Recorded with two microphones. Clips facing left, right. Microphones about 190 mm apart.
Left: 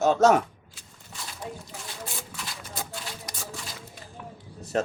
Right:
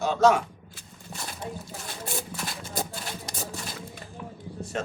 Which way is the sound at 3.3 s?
25° right (ahead or behind).